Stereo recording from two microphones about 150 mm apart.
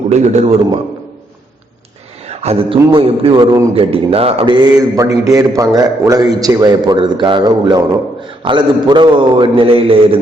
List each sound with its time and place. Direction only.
0.1 s a man's voice: 50° right (ahead or behind)
2.2 s a man's voice: 45° right (ahead or behind)
5.0 s a man's voice: 20° right (ahead or behind); by 10.2 s 40° right (ahead or behind)